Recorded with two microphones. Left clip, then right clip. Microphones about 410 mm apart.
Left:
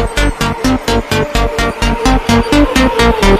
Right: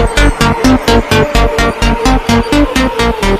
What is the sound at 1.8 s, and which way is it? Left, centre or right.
Music, right.